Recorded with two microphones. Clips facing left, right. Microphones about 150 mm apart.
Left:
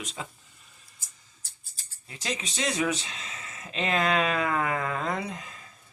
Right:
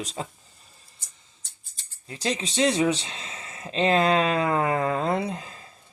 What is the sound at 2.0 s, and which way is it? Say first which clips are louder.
Speech: right 6 dB; 35° right (ahead or behind).